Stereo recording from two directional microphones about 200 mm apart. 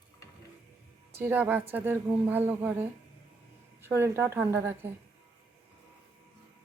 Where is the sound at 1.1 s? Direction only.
10° right (ahead or behind).